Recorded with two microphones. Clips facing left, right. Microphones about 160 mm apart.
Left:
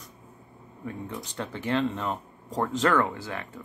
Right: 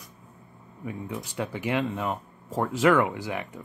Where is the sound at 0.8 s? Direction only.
10° right (ahead or behind).